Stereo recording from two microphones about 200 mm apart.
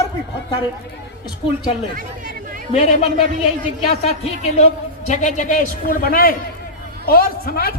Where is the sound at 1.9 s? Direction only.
45° right (ahead or behind).